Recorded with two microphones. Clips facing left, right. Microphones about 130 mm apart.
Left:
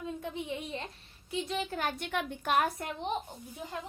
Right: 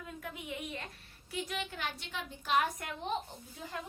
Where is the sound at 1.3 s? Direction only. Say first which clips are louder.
Left 5 dB; 25° left (ahead or behind); by 2.6 s 55° left (ahead or behind).